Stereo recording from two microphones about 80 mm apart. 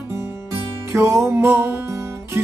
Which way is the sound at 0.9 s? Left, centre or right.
Right.